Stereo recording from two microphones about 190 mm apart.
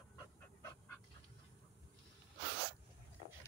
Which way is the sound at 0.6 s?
15° left (ahead or behind).